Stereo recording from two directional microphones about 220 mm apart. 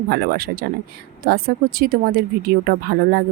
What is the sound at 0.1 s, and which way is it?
Speech, 45° right (ahead or behind).